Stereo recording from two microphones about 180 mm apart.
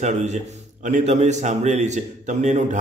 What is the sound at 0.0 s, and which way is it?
A man's voice, 40° right (ahead or behind).